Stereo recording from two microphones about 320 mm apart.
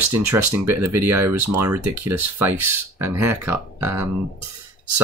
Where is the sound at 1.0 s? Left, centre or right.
Right.